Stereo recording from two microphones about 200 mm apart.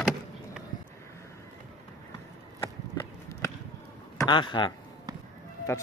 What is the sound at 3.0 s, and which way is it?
Run, 15° left (ahead or behind).